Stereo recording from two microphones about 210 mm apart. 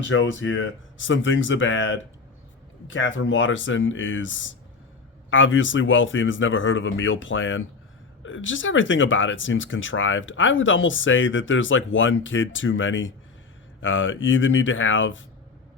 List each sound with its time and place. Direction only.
0.1 s speech: 65° left (ahead or behind)